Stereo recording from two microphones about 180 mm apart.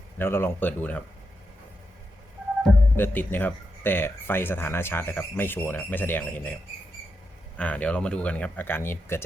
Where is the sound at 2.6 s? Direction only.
5° left (ahead or behind).